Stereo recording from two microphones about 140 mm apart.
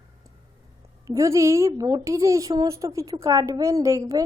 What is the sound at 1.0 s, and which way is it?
A woman's voice, 25° right (ahead or behind).